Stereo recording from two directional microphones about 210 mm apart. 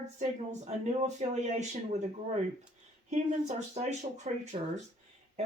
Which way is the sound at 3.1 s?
35° right (ahead or behind).